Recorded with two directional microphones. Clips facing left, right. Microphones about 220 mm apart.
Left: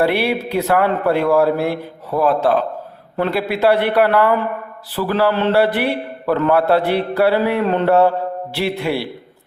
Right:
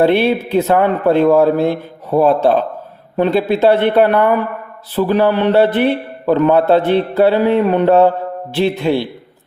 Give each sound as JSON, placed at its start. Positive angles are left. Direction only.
{"t": 0.0, "sound": "a man's voice", "side_deg": -20}